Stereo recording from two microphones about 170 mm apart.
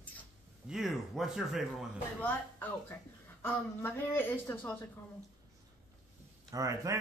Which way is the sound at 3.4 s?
15° left (ahead or behind).